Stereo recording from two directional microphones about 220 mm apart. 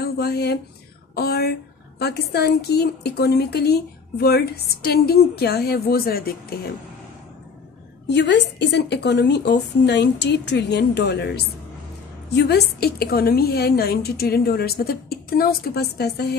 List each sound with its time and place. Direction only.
0.0 s a woman's voice: 45° left (ahead or behind)
8.1 s a woman's voice: 50° left (ahead or behind)